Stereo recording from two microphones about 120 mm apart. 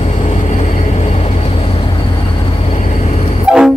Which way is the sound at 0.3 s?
65° left (ahead or behind).